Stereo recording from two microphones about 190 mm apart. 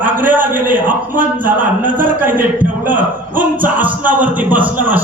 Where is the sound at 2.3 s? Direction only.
10° right (ahead or behind).